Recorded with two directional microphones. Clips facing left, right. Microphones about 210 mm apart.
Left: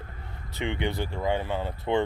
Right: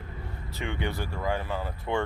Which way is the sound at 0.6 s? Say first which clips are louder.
Left 3 dB; 20° left (ahead or behind).